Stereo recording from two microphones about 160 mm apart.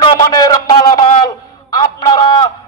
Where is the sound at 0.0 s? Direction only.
25° left (ahead or behind).